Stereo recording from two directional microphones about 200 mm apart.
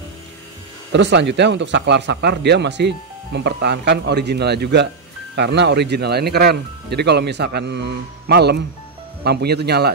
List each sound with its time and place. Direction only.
0.9 s speech: 60° right (ahead or behind)